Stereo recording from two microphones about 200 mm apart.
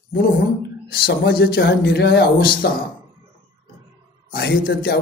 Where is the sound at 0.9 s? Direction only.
50° left (ahead or behind).